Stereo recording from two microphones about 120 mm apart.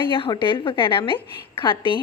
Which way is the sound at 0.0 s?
45° left (ahead or behind).